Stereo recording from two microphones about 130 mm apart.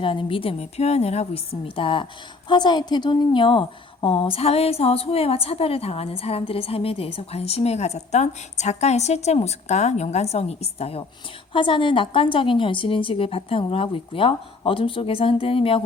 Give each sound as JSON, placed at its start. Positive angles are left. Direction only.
{"t": 0.0, "sound": "a woman's voice", "side_deg": 40}
{"t": 11.5, "sound": "a woman's voice", "side_deg": 40}